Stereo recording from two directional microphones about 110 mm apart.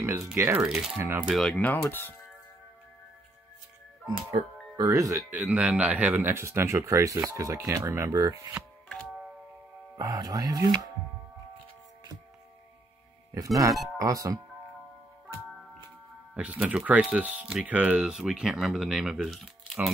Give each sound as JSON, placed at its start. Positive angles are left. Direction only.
{"t": 0.3, "sound": "speech", "side_deg": -20}
{"t": 0.7, "sound": "speech", "side_deg": -5}
{"t": 0.9, "sound": "speech", "side_deg": -20}
{"t": 1.2, "sound": "speech", "side_deg": 0}
{"t": 1.8, "sound": "speech", "side_deg": 20}
{"t": 4.4, "sound": "speech", "side_deg": -65}
{"t": 4.7, "sound": "speech", "side_deg": -30}
{"t": 5.3, "sound": "speech", "side_deg": -15}
{"t": 9.9, "sound": "speech", "side_deg": -35}
{"t": 13.3, "sound": "speech", "side_deg": -30}
{"t": 16.3, "sound": "speech", "side_deg": -10}